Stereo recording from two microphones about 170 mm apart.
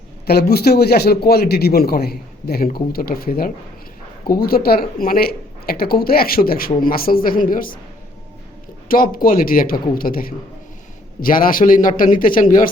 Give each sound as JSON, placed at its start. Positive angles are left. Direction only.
{"t": 0.3, "sound": "a man's voice", "side_deg": 65}
{"t": 8.9, "sound": "a man's voice", "side_deg": 55}